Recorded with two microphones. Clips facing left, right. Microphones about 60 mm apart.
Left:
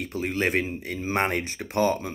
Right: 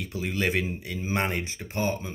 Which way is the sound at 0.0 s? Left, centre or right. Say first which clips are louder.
Left 2 dB; left.